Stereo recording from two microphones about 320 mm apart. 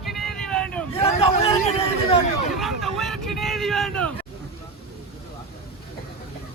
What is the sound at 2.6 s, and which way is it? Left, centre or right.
Speech, centre.